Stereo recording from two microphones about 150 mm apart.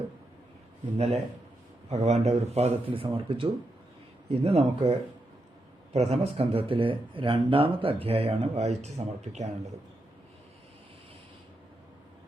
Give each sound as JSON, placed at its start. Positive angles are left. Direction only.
{"t": 0.9, "sound": "speech", "side_deg": -45}
{"t": 5.9, "sound": "speech", "side_deg": -45}